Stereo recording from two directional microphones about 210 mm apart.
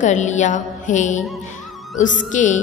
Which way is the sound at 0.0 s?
35° left (ahead or behind).